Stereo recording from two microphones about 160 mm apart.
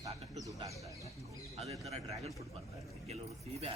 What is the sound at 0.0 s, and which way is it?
Bird, 20° right (ahead or behind).